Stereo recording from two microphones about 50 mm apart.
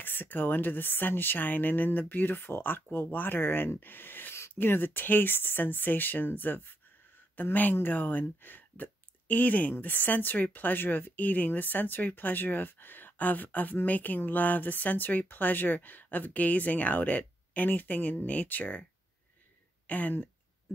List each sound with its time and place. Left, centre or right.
0.0 s a woman's voice: left
19.9 s a woman's voice: left